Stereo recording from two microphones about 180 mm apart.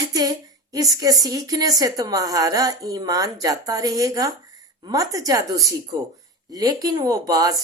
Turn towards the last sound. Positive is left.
turn(degrees=-20)  # may be behind; listen again after turning